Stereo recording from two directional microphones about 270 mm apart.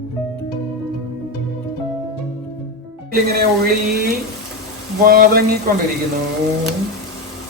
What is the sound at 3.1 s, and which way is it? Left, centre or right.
Speech, right.